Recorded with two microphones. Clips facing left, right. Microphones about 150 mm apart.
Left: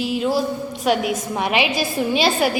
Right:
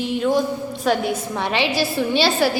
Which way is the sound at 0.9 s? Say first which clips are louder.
Left 1 dB; 35° right (ahead or behind).